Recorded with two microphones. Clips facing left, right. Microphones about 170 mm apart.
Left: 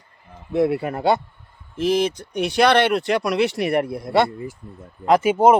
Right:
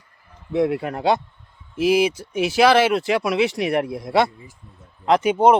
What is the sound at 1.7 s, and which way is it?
Speech, 10° right (ahead or behind).